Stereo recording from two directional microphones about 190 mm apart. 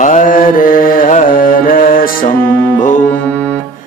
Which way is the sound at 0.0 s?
45° left (ahead or behind).